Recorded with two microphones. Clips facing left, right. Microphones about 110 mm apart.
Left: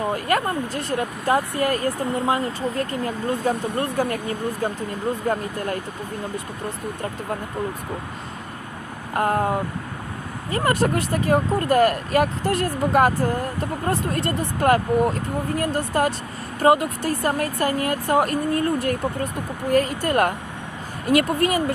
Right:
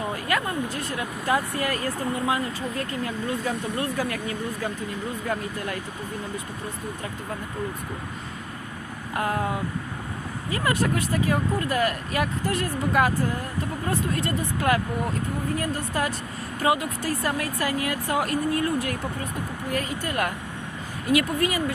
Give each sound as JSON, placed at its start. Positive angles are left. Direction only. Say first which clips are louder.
{"t": 0.1, "sound": "speech", "louder": "left 5 dB", "side_deg": 40}
{"t": 9.1, "sound": "speech", "louder": "left 5 dB", "side_deg": 40}